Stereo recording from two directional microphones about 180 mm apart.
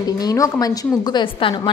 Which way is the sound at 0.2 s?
20° left (ahead or behind).